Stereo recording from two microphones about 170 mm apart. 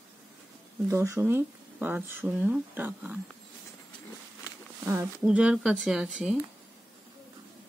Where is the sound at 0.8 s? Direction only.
15° right (ahead or behind).